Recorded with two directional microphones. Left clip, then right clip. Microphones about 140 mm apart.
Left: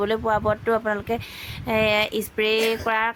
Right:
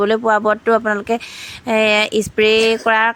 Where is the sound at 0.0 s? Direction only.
40° right (ahead or behind).